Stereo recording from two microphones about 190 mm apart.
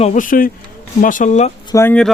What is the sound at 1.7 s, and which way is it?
Speech, 10° left (ahead or behind).